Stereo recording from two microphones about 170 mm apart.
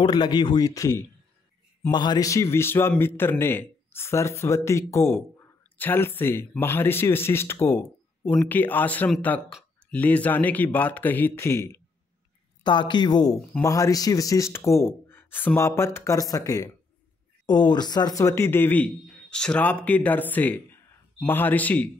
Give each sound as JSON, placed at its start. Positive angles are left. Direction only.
{"t": 0.0, "sound": "a man's voice", "side_deg": 25}
{"t": 9.5, "sound": "a sound", "side_deg": 0}
{"t": 9.9, "sound": "speech", "side_deg": 10}
{"t": 12.6, "sound": "a man's voice", "side_deg": 25}